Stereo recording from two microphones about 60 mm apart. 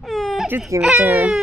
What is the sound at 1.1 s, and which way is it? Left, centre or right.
Speech, centre.